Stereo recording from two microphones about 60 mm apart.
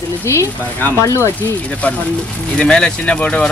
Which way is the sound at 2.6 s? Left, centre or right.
Centre.